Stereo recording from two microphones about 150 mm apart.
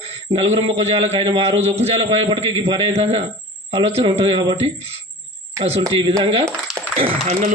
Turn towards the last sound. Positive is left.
turn(degrees=-45)  # may be behind; listen again after turning